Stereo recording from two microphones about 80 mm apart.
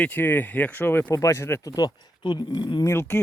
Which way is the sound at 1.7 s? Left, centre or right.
Left.